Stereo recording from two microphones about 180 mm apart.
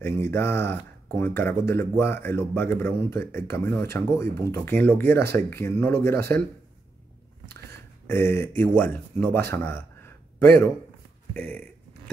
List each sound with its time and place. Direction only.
0.0 s speech: 15° left (ahead or behind)
8.1 s speech: 15° left (ahead or behind)